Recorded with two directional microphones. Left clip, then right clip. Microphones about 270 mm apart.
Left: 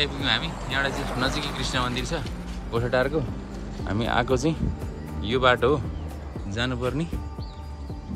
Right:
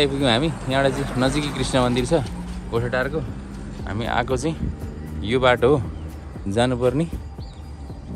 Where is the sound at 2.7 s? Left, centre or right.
Centre.